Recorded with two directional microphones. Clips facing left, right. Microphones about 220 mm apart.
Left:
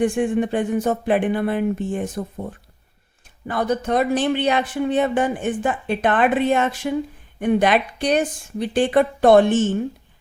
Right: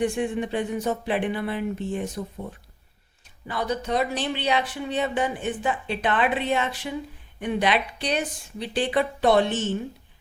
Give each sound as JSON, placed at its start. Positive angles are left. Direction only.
{"t": 0.0, "sound": "speech", "side_deg": 50}